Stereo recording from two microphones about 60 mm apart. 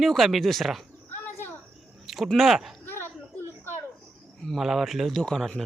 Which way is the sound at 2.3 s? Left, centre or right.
Centre.